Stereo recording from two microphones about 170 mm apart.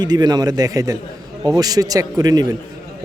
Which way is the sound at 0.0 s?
25° right (ahead or behind).